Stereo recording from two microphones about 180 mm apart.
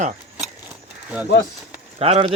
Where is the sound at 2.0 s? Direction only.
35° right (ahead or behind).